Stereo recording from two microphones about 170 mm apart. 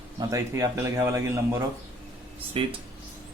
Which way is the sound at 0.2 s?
20° right (ahead or behind).